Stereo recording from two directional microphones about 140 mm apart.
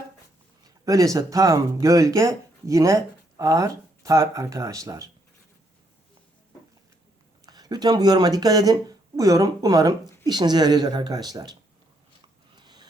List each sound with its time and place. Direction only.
0.6 s speech: 25° right (ahead or behind)
7.4 s speech: 30° right (ahead or behind)
12.5 s a sound: 30° right (ahead or behind)